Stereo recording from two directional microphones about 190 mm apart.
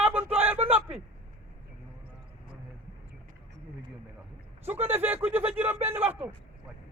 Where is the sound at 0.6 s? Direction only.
35° right (ahead or behind).